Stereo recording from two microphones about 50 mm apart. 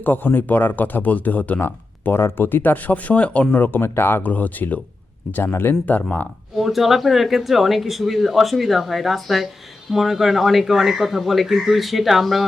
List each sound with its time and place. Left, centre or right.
0.0 s speech: left
2.1 s speech: left
3.5 s speech: left
4.2 s speech: left
5.4 s speech: left
5.8 s speech: left
6.6 s speech: centre